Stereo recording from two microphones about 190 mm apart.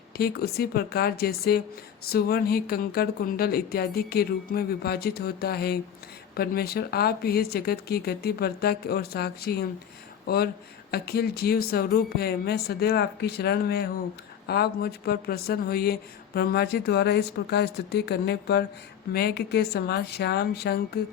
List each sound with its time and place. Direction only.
0.2 s speech: 55° left (ahead or behind)